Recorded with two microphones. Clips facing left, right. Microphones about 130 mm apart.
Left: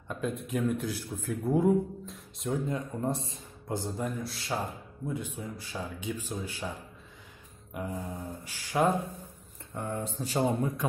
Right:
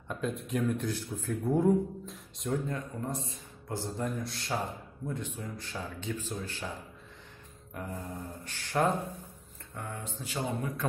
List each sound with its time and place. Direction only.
0.1 s speech: centre (ahead or behind)
2.7 s speech: 25° left (ahead or behind)
4.0 s speech: 5° left (ahead or behind)
7.7 s mantra: 15° left (ahead or behind)
8.5 s speech: 10° left (ahead or behind)
9.8 s speech: 30° left (ahead or behind)